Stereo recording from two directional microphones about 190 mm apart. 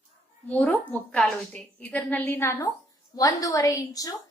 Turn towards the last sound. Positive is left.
turn(degrees=15)  # may be behind; listen again after turning